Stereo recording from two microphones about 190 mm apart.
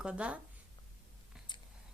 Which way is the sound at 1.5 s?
25° left (ahead or behind).